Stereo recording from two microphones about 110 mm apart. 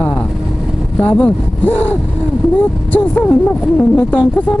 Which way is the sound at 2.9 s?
15° left (ahead or behind).